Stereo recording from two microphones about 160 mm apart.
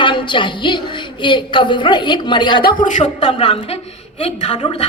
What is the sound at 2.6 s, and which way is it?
Speech, 50° left (ahead or behind).